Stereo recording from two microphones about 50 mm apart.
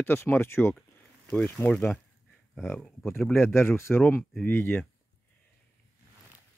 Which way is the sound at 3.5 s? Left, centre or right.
Left.